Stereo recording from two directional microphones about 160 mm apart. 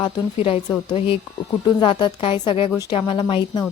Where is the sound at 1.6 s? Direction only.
30° left (ahead or behind).